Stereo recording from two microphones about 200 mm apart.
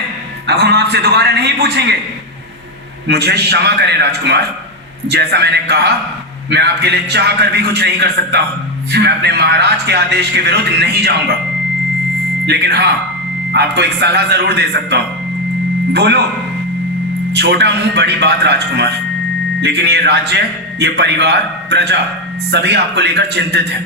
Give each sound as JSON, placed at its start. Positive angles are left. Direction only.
{"t": 0.4, "sound": "a man's voice", "side_deg": -55}
{"t": 3.1, "sound": "a man's voice", "side_deg": -55}
{"t": 12.5, "sound": "a man's voice", "side_deg": -55}
{"t": 17.3, "sound": "a man's voice", "side_deg": -55}